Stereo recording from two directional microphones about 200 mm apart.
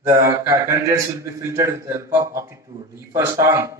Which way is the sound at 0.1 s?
15° right (ahead or behind).